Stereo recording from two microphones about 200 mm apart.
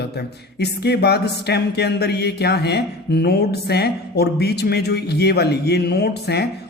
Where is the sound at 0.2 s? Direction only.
55° left (ahead or behind).